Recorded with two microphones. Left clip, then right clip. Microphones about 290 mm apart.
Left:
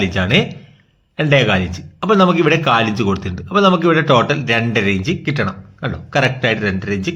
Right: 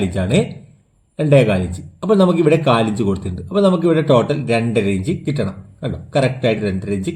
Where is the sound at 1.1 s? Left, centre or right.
Centre.